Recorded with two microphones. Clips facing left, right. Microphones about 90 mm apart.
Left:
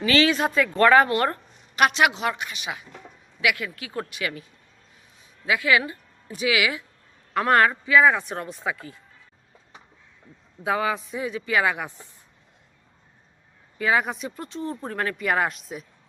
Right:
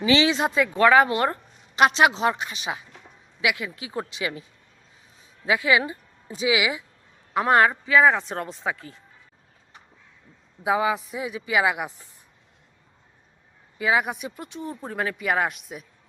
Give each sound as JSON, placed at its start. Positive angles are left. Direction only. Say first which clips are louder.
{"t": 0.0, "sound": "a woman's voice", "louder": "even", "side_deg": -20}
{"t": 5.5, "sound": "speech", "louder": "right 1 dB", "side_deg": -25}
{"t": 10.6, "sound": "speech", "louder": "right 2 dB", "side_deg": -10}
{"t": 13.7, "sound": "speech", "louder": "even", "side_deg": -10}